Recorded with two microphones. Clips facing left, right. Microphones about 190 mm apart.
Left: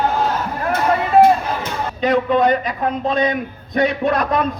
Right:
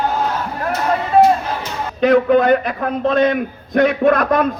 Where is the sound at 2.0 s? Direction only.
55° right (ahead or behind).